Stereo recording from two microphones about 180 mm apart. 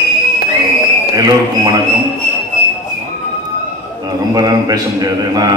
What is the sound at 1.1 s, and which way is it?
Speech, 20° right (ahead or behind).